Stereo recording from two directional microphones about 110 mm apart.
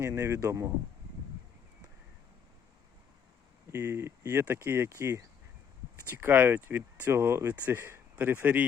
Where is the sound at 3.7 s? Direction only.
25° right (ahead or behind).